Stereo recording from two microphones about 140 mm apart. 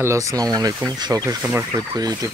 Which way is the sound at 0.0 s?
20° right (ahead or behind).